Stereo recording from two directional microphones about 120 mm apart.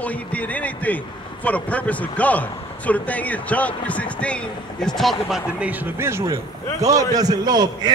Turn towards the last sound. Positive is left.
turn(degrees=-35)  # may be behind; listen again after turning